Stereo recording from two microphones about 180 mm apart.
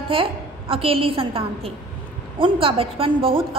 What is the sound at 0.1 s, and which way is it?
A woman's voice, 30° right (ahead or behind).